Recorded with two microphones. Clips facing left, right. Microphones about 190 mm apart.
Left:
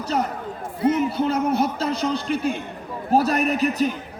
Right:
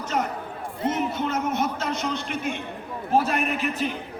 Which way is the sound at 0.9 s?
35° left (ahead or behind).